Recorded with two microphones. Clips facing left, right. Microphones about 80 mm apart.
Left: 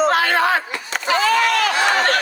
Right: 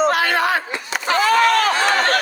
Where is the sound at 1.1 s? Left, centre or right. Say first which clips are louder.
Right 2 dB; right.